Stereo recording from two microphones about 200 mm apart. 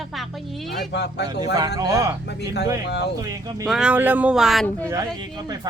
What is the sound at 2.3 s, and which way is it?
Speech, 55° left (ahead or behind).